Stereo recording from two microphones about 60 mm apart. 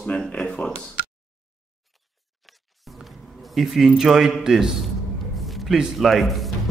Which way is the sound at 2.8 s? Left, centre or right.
Centre.